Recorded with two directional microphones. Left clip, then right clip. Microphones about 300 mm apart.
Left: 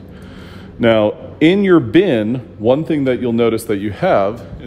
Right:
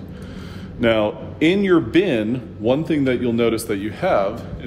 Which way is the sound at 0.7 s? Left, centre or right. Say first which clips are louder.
Left 5 dB; left.